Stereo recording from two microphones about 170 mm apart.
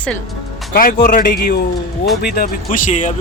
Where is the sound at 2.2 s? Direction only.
65° left (ahead or behind); by 3.1 s 45° left (ahead or behind).